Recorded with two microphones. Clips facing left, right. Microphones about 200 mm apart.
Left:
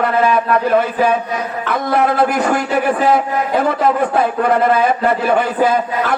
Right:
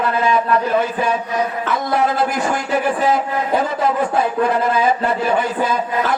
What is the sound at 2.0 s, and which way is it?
A man's voice, 60° left (ahead or behind).